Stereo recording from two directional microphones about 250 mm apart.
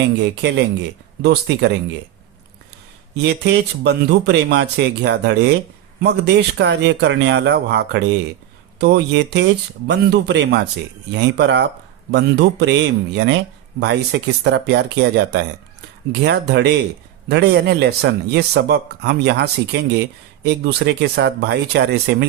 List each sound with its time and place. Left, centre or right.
0.0 s speech: right
3.2 s speech: right